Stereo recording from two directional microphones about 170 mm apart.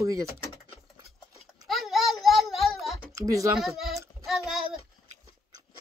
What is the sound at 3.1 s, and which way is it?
Speech, 20° right (ahead or behind).